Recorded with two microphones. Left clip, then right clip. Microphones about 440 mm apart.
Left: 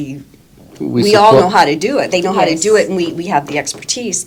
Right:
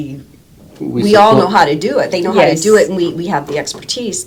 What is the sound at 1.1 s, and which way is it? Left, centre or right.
Speech, left.